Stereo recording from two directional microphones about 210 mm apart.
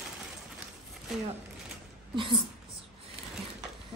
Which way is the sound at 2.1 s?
25° right (ahead or behind).